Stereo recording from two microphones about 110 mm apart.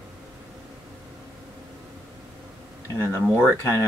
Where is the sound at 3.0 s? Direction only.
25° left (ahead or behind).